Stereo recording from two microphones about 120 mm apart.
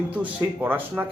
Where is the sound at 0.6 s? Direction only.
15° right (ahead or behind).